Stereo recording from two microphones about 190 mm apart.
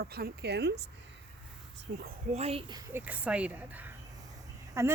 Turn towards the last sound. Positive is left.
turn(degrees=-15)  # may be behind; listen again after turning